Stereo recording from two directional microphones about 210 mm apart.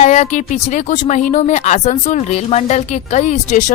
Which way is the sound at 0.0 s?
35° left (ahead or behind).